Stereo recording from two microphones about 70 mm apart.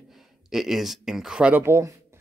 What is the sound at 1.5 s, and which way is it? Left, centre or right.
Speech, right.